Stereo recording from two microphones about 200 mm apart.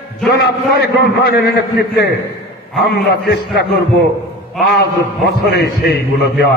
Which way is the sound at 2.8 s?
55° left (ahead or behind).